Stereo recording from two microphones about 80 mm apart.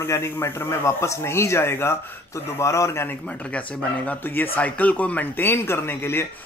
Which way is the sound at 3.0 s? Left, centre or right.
Centre.